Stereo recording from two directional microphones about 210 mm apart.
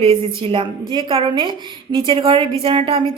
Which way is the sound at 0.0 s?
25° right (ahead or behind).